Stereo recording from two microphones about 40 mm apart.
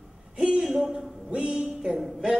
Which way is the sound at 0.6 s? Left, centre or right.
Centre.